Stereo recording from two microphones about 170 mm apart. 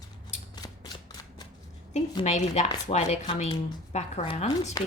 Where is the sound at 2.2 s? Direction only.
40° left (ahead or behind).